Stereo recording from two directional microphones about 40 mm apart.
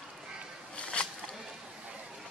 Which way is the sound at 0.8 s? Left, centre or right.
Left.